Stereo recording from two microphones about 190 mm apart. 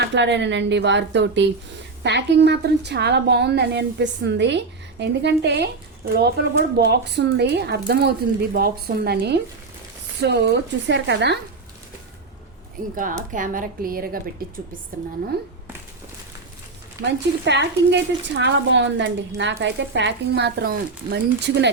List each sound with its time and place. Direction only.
0.1 s a woman's voice: 70° right (ahead or behind)
13.0 s speech: 45° right (ahead or behind)
17.0 s a woman's voice: 65° right (ahead or behind)